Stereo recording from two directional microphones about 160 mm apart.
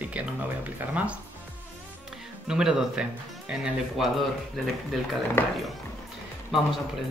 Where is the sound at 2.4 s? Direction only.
5° right (ahead or behind).